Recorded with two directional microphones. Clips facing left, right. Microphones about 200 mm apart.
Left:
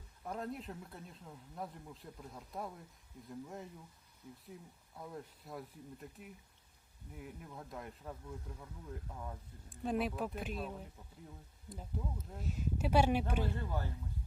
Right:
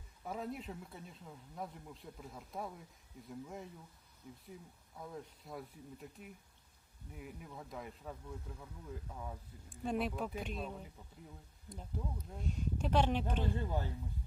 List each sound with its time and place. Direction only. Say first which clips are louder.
0.3 s speech: even; centre (ahead or behind)
4.9 s speech: even; centre (ahead or behind)
13.6 s speech: right 2 dB; 20° right (ahead or behind)